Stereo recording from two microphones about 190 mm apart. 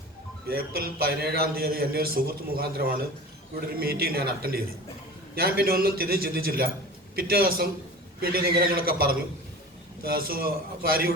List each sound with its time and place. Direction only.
0.4 s a man's voice: 55° right (ahead or behind)